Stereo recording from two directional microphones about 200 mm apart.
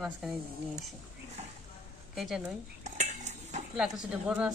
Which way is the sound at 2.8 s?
35° right (ahead or behind).